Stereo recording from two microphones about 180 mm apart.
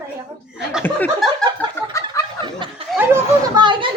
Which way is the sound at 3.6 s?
25° right (ahead or behind).